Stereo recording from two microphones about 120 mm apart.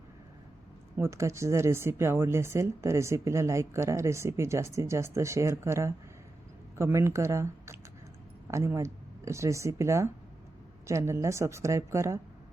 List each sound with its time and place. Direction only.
0.9 s speech: 20° right (ahead or behind)